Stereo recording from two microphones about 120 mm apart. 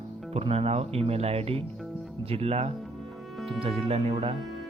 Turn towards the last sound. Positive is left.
turn(degrees=-55)  # may be behind; listen again after turning